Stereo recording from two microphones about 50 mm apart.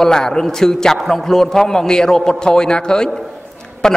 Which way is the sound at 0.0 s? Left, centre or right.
Centre.